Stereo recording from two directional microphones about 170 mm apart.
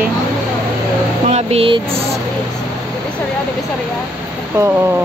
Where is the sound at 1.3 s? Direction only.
40° right (ahead or behind).